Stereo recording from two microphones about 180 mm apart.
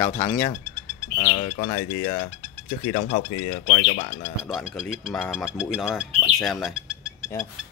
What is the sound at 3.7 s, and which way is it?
Speech, 45° left (ahead or behind).